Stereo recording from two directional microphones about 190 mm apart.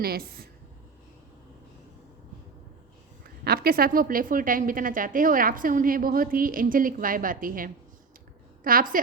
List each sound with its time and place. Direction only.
0.0 s a woman's voice: 55° right (ahead or behind)
3.2 s a woman's voice: 55° right (ahead or behind)